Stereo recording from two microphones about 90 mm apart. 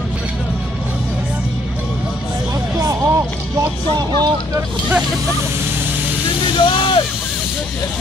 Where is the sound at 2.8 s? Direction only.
35° right (ahead or behind).